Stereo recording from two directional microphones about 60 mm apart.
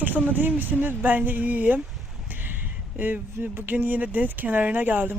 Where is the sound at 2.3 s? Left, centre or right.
Right.